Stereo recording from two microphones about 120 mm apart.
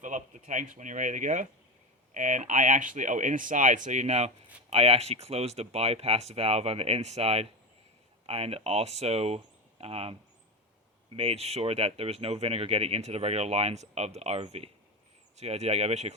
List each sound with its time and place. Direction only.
0.0 s speech: 90° right; by 4.3 s 70° right (ahead or behind)
4.7 s speech: 60° right (ahead or behind)